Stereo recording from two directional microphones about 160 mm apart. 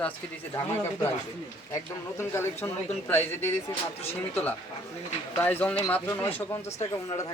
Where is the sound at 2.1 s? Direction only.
15° left (ahead or behind).